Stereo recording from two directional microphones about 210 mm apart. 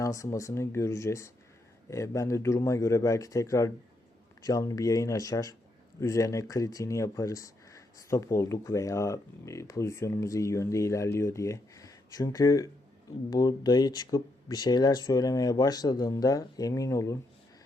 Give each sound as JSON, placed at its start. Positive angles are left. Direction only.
{"t": 0.0, "sound": "speech", "side_deg": 15}